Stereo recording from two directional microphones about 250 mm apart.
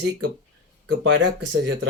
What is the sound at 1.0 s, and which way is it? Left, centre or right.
Speech, right.